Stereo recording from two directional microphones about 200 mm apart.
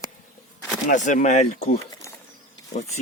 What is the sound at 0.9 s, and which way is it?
Speech, 40° left (ahead or behind).